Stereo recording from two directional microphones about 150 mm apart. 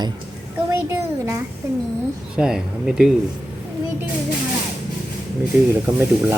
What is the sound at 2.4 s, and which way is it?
Speech, 5° right (ahead or behind).